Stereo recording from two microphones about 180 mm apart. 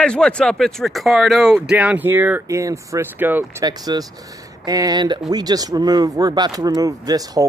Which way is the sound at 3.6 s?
20° right (ahead or behind).